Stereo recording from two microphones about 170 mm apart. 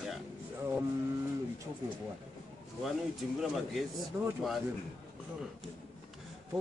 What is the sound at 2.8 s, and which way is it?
Speech, centre (ahead or behind).